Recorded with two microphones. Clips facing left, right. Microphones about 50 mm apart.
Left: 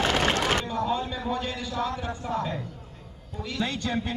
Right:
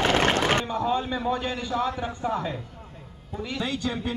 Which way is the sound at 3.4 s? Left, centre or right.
Centre.